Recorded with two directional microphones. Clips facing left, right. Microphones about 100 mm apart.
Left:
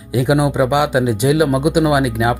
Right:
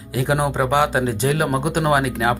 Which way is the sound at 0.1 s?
15° left (ahead or behind).